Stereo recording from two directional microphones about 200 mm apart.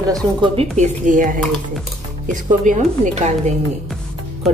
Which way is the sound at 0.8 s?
40° right (ahead or behind).